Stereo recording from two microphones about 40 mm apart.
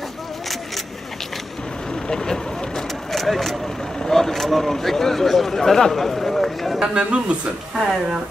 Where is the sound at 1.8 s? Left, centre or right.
Centre.